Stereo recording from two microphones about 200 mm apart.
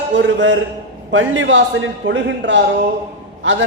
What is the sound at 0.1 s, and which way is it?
A man's voice, 65° right (ahead or behind).